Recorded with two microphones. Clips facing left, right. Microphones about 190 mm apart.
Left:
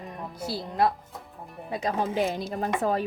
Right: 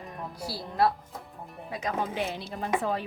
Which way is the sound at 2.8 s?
40° left (ahead or behind).